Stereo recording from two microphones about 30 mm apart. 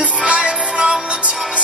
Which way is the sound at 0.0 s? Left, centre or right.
Right.